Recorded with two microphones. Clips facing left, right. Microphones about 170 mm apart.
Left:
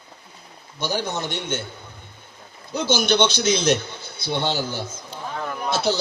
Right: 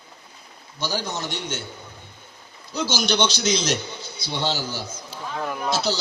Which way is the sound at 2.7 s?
55° left (ahead or behind).